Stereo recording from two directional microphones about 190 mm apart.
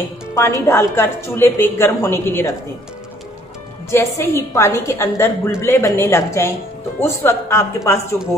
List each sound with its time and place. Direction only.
0.3 s a woman's voice: 15° left (ahead or behind)
3.9 s a woman's voice: 15° left (ahead or behind)